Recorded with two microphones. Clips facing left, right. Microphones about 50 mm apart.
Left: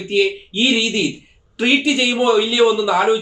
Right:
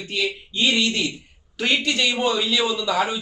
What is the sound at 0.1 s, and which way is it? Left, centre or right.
Speech, centre.